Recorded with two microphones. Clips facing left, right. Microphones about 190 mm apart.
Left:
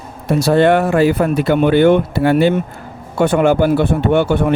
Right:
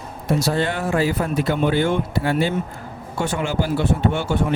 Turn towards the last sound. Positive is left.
turn(degrees=60)  # may be behind; listen again after turning